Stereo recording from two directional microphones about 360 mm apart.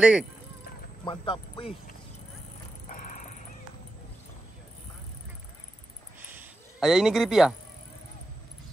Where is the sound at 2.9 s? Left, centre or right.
Left.